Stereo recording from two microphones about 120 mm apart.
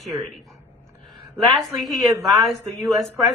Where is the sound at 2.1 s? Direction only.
25° right (ahead or behind).